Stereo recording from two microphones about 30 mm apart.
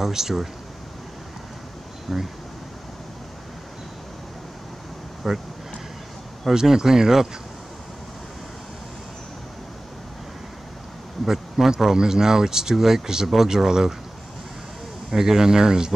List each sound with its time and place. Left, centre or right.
0.0 s speech: centre
2.1 s speech: centre
5.2 s speech: centre
6.5 s speech: centre
11.3 s speech: centre
12.0 s speech: centre
15.0 s speech: centre